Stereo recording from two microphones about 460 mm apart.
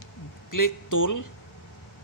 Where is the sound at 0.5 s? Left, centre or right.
Left.